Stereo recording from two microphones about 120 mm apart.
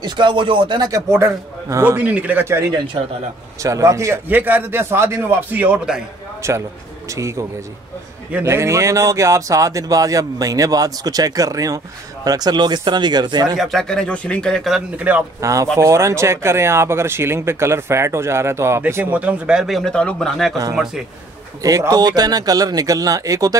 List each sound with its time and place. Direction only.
0.0 s speech: 40° right (ahead or behind); by 2.6 s 15° right (ahead or behind)
3.6 s speech: 25° right (ahead or behind); by 6.0 s 10° right (ahead or behind)
6.4 s speech: 25° right (ahead or behind)
13.6 s speech: centre (ahead or behind)
15.1 s speech: 15° right (ahead or behind)
15.4 s speech: 25° right (ahead or behind); by 21.0 s 5° right (ahead or behind)
21.6 s speech: 30° right (ahead or behind)